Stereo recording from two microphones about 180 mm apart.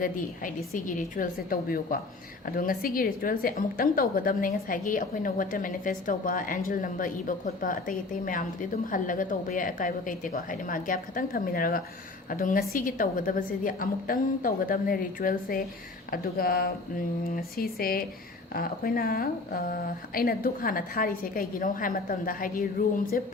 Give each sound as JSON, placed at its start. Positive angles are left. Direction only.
{"t": 0.0, "sound": "a woman's voice", "side_deg": 50}